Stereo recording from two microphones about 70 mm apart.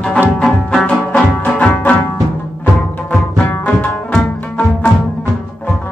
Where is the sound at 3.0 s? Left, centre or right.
Left.